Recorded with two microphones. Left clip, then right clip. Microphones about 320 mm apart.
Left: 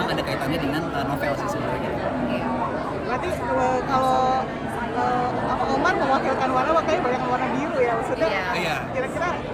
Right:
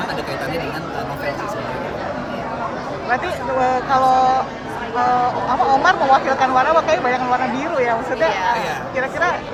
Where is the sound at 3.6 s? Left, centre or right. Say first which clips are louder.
Right 7 dB; right.